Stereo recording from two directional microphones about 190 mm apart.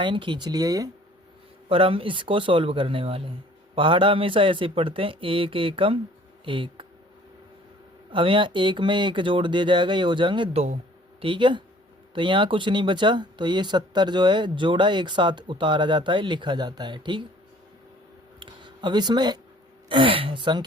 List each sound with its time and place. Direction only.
0.0 s speech: 25° right (ahead or behind)
8.1 s speech: 25° right (ahead or behind)
18.3 s a sound: 25° right (ahead or behind)
19.9 s speech: 30° right (ahead or behind)